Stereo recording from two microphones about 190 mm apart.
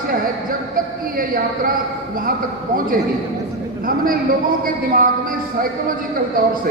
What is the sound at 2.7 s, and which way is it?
A man's voice, 50° right (ahead or behind).